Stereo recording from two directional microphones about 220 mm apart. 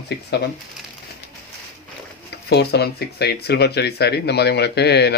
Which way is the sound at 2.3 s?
50° left (ahead or behind).